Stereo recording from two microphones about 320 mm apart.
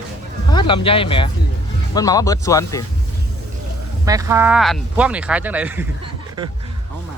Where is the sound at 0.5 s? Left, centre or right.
Centre.